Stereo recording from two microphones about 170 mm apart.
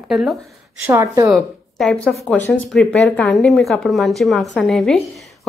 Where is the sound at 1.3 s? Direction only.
Centre (ahead or behind).